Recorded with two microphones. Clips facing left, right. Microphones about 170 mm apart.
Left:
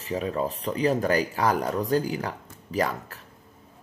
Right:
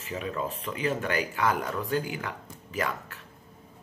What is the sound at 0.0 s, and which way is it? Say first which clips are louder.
Speech: left 5 dB; 35° left (ahead or behind).